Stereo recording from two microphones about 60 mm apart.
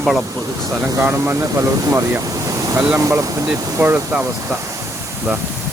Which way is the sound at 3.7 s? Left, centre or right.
Right.